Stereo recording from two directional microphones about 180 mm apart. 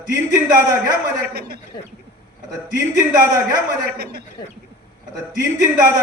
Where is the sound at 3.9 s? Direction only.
60° right (ahead or behind).